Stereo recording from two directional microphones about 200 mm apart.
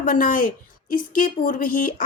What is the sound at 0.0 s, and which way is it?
A woman's voice, 40° left (ahead or behind).